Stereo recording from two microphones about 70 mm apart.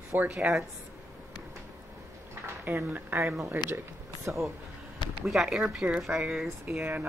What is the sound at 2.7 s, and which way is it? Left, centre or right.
Speech, right.